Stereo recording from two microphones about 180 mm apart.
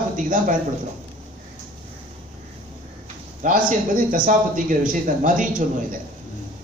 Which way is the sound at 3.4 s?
45° right (ahead or behind).